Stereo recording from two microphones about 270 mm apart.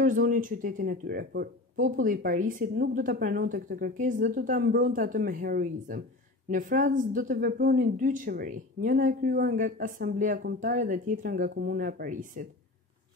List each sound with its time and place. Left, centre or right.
0.0 s a woman's voice: right